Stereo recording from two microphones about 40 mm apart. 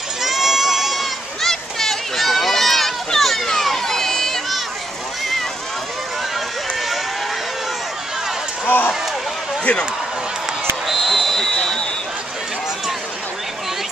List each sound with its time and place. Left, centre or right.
0.2 s run: centre
1.4 s a sound: centre
3.5 s crowd: centre
8.6 s run: left
10.9 s basketball bounce: centre
11.5 s a sound: centre